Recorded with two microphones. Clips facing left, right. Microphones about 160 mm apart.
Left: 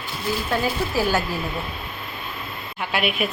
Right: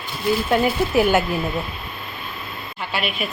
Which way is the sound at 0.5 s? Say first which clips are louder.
Right 5 dB; 20° right (ahead or behind).